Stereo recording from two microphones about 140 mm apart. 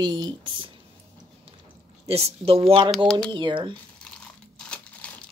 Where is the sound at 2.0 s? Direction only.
45° right (ahead or behind).